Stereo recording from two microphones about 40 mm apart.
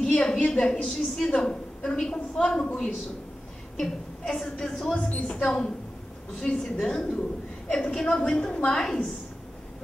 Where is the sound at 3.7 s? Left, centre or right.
Centre.